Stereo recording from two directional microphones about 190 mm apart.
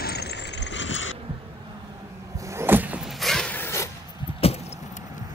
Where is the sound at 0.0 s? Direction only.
55° left (ahead or behind); by 1.1 s 85° left.